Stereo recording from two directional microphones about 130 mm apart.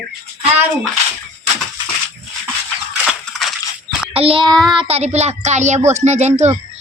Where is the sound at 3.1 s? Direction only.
Centre (ahead or behind).